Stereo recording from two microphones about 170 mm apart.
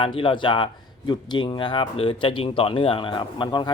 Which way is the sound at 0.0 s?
30° left (ahead or behind).